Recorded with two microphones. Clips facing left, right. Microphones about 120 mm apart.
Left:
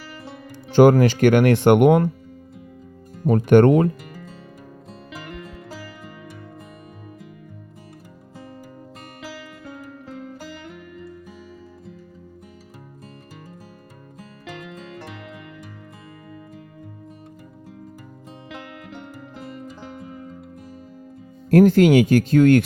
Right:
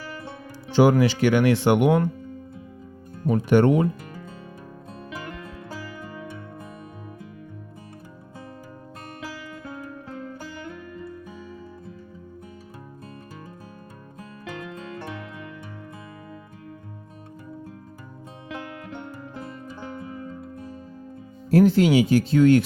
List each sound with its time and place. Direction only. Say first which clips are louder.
0.7 s speech: left 4 dB; 50° left (ahead or behind)
3.2 s speech: left 5 dB; 55° left (ahead or behind)
21.5 s speech: left 4 dB; 50° left (ahead or behind)